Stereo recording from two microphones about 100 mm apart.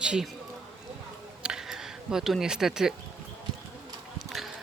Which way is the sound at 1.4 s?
5° right (ahead or behind).